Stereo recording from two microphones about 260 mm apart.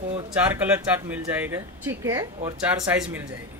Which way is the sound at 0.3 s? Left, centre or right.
Centre.